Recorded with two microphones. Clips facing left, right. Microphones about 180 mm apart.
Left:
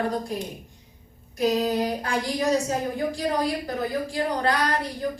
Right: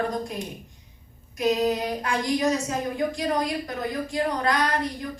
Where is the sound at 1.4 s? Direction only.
35° left (ahead or behind).